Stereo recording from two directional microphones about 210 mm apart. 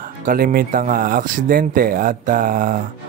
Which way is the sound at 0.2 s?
40° right (ahead or behind).